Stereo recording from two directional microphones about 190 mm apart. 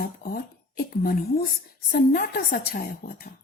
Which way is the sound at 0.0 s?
50° left (ahead or behind).